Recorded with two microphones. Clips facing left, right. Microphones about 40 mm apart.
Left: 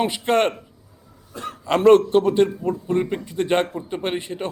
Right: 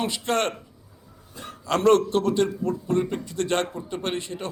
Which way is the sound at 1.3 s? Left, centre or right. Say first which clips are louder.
Left 8 dB; left.